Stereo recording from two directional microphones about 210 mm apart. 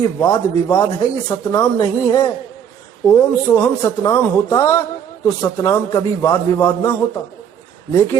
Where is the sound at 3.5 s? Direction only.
15° left (ahead or behind).